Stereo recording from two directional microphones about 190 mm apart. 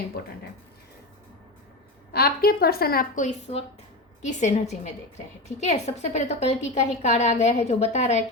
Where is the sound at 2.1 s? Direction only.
55° left (ahead or behind).